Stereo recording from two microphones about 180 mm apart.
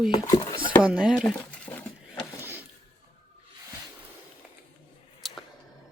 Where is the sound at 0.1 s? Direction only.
25° left (ahead or behind).